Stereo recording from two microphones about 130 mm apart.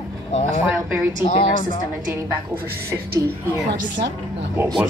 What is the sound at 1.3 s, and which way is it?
Speech, 65° left (ahead or behind).